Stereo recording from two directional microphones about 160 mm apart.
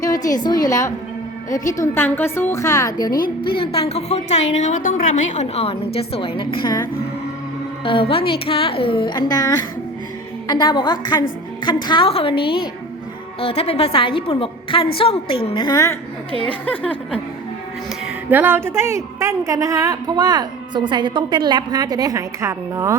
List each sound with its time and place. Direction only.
0.0 s a woman's voice: 20° left (ahead or behind)
3.1 s a woman's voice: 65° left (ahead or behind)
3.6 s a woman's voice: 35° left (ahead or behind)
7.9 s a woman's voice: 35° left (ahead or behind)
16.6 s a woman's voice: 10° left (ahead or behind)
18.0 s a woman's voice: 10° right (ahead or behind)